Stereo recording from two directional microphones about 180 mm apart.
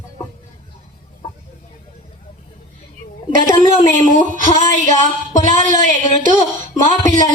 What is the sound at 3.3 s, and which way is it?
A woman's voice, 50° right (ahead or behind).